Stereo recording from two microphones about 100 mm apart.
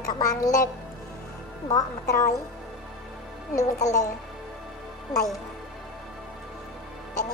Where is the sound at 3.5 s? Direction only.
35° left (ahead or behind).